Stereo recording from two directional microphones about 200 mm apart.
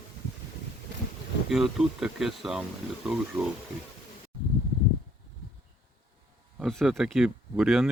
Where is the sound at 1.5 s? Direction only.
Centre (ahead or behind).